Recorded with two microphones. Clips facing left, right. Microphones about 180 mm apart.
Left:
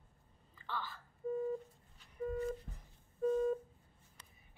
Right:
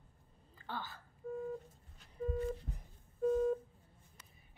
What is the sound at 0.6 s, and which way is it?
Speech, 45° right (ahead or behind).